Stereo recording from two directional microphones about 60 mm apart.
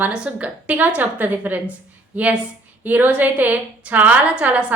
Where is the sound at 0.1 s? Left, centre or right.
Right.